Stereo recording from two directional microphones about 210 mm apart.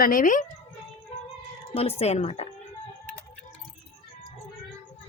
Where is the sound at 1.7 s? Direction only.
30° left (ahead or behind).